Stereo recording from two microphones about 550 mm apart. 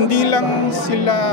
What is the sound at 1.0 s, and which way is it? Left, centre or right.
Speech, left.